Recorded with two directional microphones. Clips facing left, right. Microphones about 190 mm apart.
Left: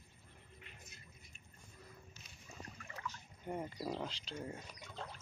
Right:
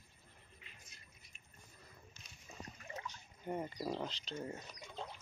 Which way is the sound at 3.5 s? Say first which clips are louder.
Right 1 dB; 5° right (ahead or behind).